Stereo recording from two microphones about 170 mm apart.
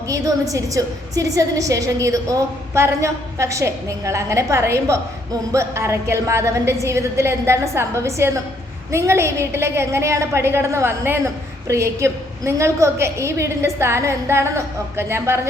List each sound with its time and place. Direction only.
0.1 s a woman's voice: 20° right (ahead or behind)